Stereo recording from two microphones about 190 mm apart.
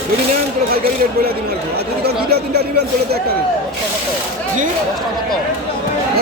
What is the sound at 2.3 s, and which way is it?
Speech, 60° right (ahead or behind).